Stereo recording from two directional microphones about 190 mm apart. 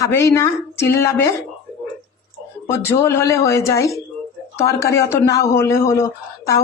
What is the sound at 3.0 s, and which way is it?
Speech, 15° left (ahead or behind).